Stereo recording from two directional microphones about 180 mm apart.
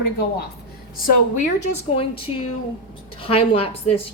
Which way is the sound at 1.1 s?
45° left (ahead or behind).